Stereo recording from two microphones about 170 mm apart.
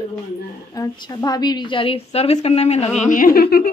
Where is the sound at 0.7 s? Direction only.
20° left (ahead or behind); by 2.9 s 35° left (ahead or behind).